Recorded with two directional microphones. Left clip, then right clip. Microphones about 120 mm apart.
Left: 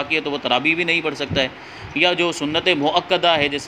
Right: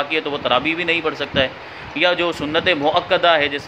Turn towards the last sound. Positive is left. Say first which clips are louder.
# right 2 dB
turn(degrees=50)  # may be behind; listen again after turning